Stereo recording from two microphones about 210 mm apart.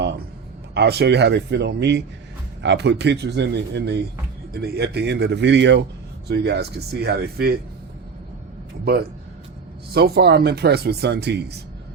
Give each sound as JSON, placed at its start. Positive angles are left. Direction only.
{"t": 0.7, "sound": "speech", "side_deg": -55}
{"t": 9.9, "sound": "speech", "side_deg": -50}